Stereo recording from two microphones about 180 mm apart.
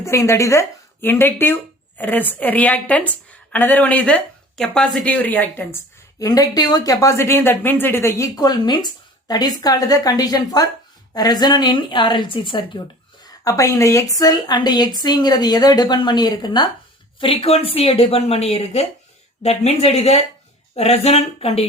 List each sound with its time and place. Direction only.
0.0 s a woman's voice: 15° left (ahead or behind); by 21.7 s 35° left (ahead or behind)